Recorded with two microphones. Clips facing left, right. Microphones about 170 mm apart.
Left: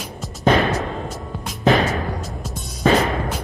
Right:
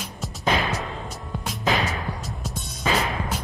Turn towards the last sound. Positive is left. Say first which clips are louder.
# left 6 dB
turn(degrees=50)  # may be behind; listen again after turning